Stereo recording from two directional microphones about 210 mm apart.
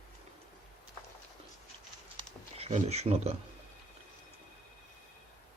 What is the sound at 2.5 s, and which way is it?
Speech, 30° right (ahead or behind).